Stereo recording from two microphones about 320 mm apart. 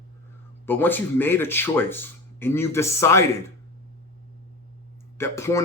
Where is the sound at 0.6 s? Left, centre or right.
Centre.